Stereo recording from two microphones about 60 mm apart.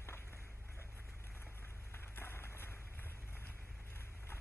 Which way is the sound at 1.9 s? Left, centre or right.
Left.